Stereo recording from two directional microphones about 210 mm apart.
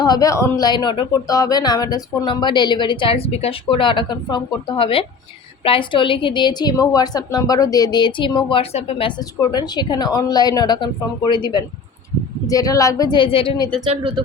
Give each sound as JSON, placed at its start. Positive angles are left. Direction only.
{"t": 0.0, "sound": "a woman's voice", "side_deg": 20}